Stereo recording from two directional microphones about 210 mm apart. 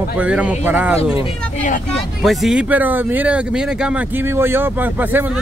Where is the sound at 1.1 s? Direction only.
35° left (ahead or behind).